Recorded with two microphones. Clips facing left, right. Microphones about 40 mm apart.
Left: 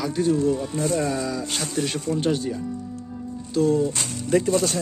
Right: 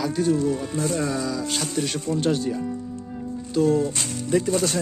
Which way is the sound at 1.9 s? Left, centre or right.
Centre.